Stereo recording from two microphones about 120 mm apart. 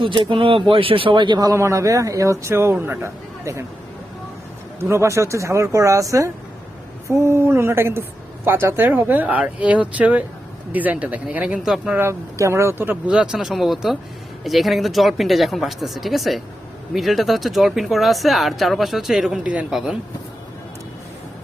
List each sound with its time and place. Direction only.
0.0 s a man's voice: 45° right (ahead or behind)
1.5 s speech: 25° right (ahead or behind)
4.8 s speech: 25° right (ahead or behind); by 11.9 s 5° right (ahead or behind)
11.9 s speech: 20° right (ahead or behind); by 20.0 s 5° right (ahead or behind)